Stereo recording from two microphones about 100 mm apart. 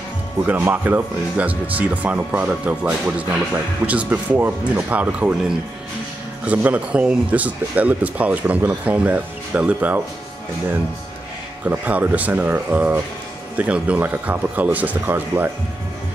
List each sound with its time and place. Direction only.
0.4 s a man's voice: 20° right (ahead or behind)
11.7 s a man's voice: 15° right (ahead or behind)